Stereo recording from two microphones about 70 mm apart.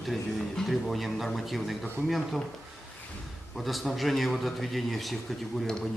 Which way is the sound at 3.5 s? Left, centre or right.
Centre.